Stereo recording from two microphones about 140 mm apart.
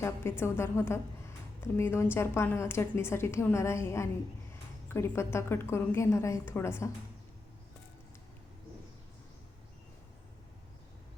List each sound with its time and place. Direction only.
0.0 s a woman's voice: 20° left (ahead or behind)